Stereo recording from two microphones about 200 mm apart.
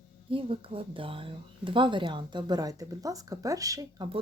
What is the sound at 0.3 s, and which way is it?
Speech, 25° right (ahead or behind).